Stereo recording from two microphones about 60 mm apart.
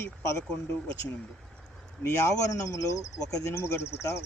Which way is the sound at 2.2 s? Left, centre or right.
Left.